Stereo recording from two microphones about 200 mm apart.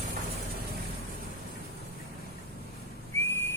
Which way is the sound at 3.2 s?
10° left (ahead or behind).